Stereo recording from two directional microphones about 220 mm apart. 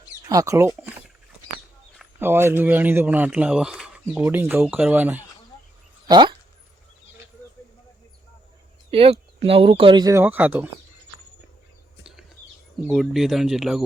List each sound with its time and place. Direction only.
0.3 s a man's voice: 15° right (ahead or behind)
2.0 s a man's voice: 10° right (ahead or behind)
6.1 s speech: 20° right (ahead or behind)
8.9 s speech: 25° right (ahead or behind); by 10.7 s 5° right (ahead or behind)
12.9 s speech: centre (ahead or behind)